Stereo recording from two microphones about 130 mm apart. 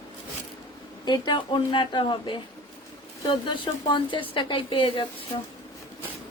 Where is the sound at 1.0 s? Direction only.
35° left (ahead or behind).